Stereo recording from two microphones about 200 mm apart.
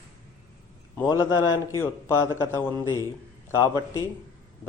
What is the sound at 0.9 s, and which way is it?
A man's voice, 15° left (ahead or behind).